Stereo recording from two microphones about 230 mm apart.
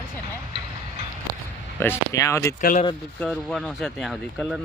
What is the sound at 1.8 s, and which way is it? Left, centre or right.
Speech, centre.